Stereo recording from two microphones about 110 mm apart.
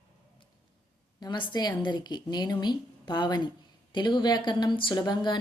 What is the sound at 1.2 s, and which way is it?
A woman's voice, 45° left (ahead or behind).